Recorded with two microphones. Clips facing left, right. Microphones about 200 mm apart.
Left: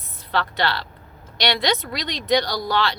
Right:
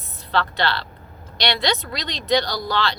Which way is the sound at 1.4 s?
20° left (ahead or behind).